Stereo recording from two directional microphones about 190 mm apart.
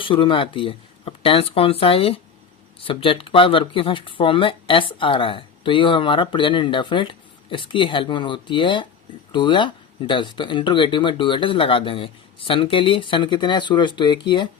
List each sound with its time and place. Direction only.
0.0 s speech: 25° left (ahead or behind)